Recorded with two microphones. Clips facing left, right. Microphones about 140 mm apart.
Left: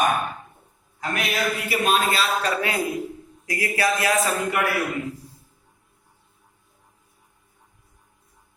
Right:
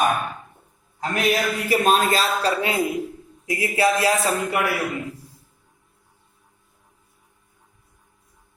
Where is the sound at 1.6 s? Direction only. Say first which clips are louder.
Right 4 dB; 40° right (ahead or behind).